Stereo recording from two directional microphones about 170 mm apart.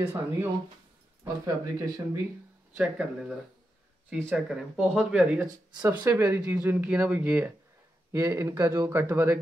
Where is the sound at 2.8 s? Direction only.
5° right (ahead or behind).